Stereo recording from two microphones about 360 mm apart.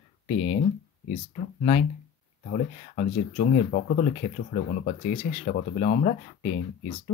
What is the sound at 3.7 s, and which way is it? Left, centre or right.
Speech, left.